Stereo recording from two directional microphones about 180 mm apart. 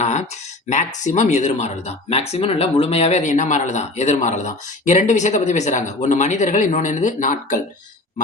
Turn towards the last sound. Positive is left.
turn(degrees=45)  # may be behind; listen again after turning